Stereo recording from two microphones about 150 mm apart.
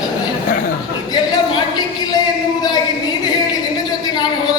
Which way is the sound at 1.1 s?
30° left (ahead or behind).